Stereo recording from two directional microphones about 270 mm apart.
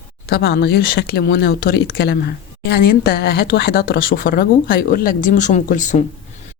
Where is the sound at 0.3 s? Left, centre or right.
Left.